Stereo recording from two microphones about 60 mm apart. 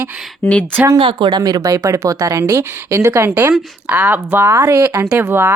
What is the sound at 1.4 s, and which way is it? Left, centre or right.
Speech, right.